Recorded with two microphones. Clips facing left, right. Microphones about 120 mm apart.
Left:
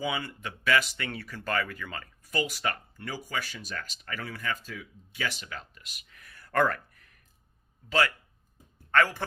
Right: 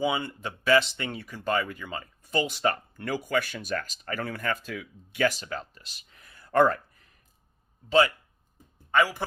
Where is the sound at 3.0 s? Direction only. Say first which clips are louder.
Right 8 dB; 60° right (ahead or behind).